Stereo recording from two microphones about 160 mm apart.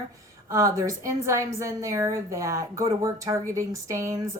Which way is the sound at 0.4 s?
20° right (ahead or behind).